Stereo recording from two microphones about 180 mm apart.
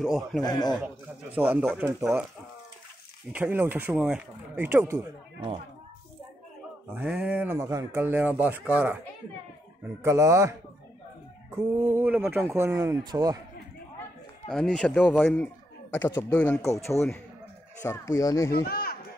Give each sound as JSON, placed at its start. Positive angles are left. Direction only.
{"t": 0.0, "sound": "speech", "side_deg": 0}
{"t": 0.4, "sound": "speech", "side_deg": 20}
{"t": 1.3, "sound": "speech", "side_deg": -10}
{"t": 3.3, "sound": "speech", "side_deg": -10}
{"t": 6.9, "sound": "speech", "side_deg": -5}
{"t": 10.0, "sound": "speech", "side_deg": -15}
{"t": 11.7, "sound": "speech", "side_deg": -10}
{"t": 14.5, "sound": "a man's voice", "side_deg": 5}
{"t": 18.5, "sound": "speech", "side_deg": 55}